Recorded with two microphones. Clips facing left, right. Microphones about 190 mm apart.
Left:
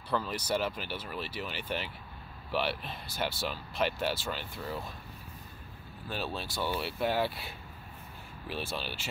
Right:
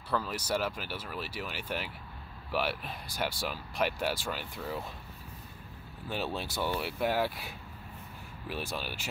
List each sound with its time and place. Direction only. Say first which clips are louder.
0.1 s speech: even; 5° right (ahead or behind)
6.0 s speech: right 2 dB; 15° right (ahead or behind)
8.5 s speech: even; 10° right (ahead or behind)